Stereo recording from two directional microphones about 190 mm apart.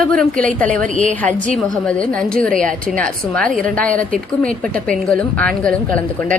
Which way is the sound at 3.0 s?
5° left (ahead or behind).